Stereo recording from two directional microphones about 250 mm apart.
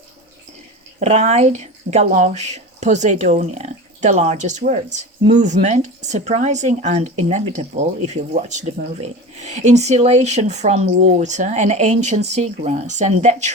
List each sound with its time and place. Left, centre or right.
0.9 s speech: right